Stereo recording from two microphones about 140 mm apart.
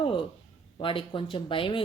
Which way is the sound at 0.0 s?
40° left (ahead or behind).